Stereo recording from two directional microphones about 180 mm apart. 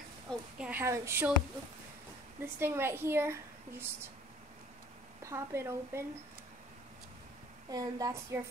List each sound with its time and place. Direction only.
0.3 s speech: 5° right (ahead or behind)
2.4 s speech: 15° right (ahead or behind)
5.2 s speech: 15° right (ahead or behind)
7.7 s speech: 20° right (ahead or behind)